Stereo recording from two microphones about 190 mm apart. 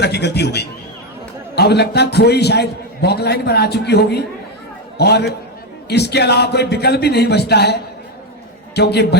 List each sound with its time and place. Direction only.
0.0 s a man's voice: 60° left (ahead or behind)